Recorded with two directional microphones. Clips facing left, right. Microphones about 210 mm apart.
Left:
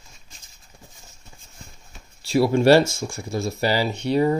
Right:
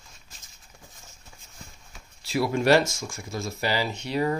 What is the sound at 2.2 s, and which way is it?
Speech, 30° left (ahead or behind).